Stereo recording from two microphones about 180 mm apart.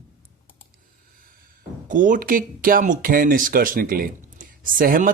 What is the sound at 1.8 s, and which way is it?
Speech, 45° right (ahead or behind).